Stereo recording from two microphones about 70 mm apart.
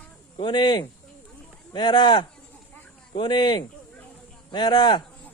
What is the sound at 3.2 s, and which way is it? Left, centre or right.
Speech, left.